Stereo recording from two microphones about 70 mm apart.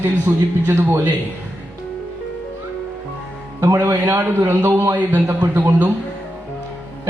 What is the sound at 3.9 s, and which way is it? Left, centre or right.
Speech, right.